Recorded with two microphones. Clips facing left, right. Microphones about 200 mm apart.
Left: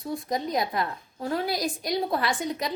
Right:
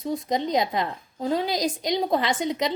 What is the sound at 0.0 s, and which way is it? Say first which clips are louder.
A woman's voice: right 4 dB; 20° right (ahead or behind).